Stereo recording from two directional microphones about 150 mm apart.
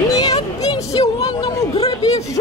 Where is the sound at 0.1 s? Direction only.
25° left (ahead or behind).